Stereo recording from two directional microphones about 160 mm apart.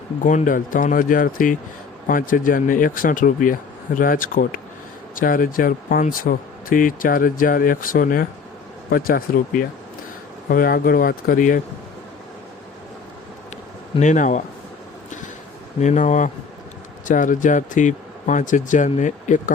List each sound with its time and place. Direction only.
0.2 s speech: 55° left (ahead or behind)
14.0 s speech: 50° left (ahead or behind)
15.8 s speech: 45° left (ahead or behind)